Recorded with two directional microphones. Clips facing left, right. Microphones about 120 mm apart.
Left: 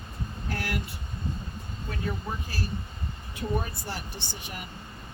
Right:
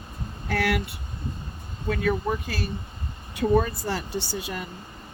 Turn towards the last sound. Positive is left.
turn(degrees=-90)